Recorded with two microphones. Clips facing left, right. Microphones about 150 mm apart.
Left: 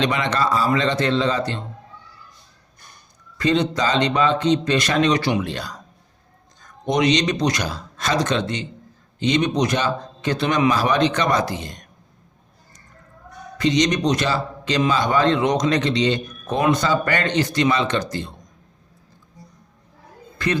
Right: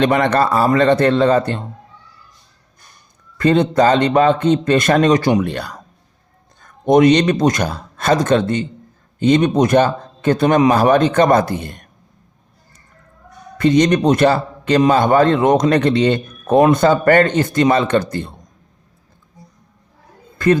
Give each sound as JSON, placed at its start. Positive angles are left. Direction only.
{"t": 0.0, "sound": "a man's voice", "side_deg": -50}
{"t": 3.3, "sound": "a man's voice", "side_deg": -55}
{"t": 13.6, "sound": "a man's voice", "side_deg": -55}
{"t": 20.4, "sound": "speech", "side_deg": -50}